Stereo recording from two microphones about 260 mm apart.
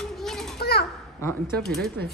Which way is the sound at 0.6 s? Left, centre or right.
Left.